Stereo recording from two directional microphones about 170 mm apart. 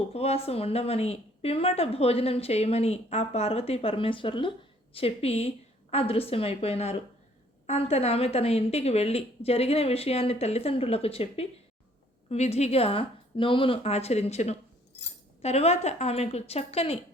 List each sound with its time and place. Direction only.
0.1 s speech: 35° left (ahead or behind)